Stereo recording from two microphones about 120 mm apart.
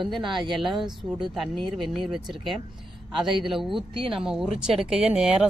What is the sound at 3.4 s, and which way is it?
A woman's voice, centre (ahead or behind).